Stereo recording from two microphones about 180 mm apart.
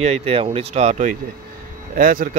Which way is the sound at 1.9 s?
50° right (ahead or behind).